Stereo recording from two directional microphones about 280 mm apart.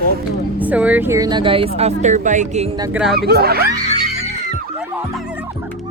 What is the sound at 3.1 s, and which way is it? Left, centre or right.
Speech, right.